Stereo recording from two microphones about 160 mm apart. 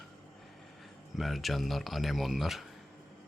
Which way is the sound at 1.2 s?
Centre (ahead or behind).